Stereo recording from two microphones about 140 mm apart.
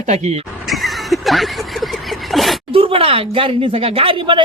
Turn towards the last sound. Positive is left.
turn(degrees=-35)  # may be behind; listen again after turning